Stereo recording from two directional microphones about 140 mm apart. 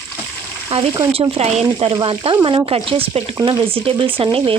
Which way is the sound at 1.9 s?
35° right (ahead or behind).